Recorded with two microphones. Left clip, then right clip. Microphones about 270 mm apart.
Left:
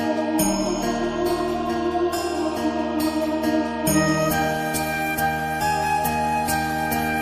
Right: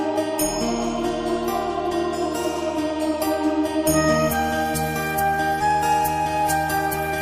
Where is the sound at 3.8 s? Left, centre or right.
Centre.